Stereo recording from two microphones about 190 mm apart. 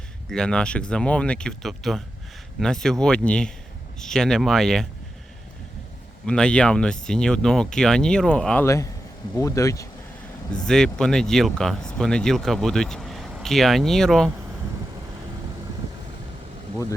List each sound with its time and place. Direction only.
0.3 s speech: 5° left (ahead or behind)
6.2 s speech: 5° left (ahead or behind)
8.6 s speech: 15° left (ahead or behind)
10.7 s speech: 5° left (ahead or behind)